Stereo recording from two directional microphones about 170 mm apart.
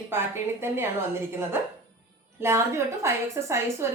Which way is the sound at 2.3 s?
15° right (ahead or behind).